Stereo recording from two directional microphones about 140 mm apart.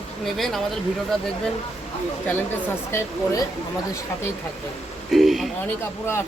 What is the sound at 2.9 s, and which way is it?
Speech, 20° left (ahead or behind).